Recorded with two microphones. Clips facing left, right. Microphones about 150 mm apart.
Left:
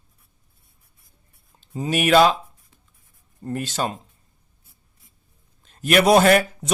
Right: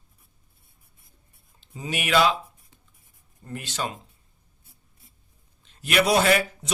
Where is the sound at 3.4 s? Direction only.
45° left (ahead or behind).